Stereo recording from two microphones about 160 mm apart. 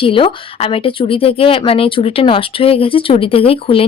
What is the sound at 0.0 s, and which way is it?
Speech, 35° left (ahead or behind).